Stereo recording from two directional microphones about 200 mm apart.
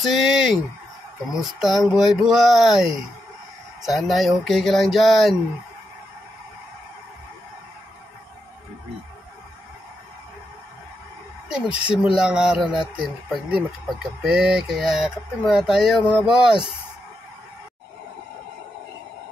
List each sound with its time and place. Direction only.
0.0 s speech: centre (ahead or behind)
11.4 s speech: 5° right (ahead or behind)